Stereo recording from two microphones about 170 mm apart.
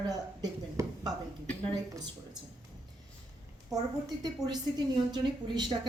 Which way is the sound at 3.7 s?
20° right (ahead or behind).